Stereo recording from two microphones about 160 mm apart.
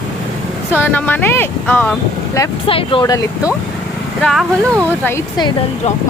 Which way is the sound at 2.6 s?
35° left (ahead or behind).